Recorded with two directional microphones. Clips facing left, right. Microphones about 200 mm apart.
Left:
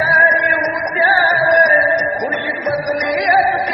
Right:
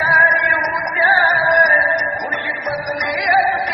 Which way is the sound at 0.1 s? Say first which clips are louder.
Left 3 dB; 30° left (ahead or behind).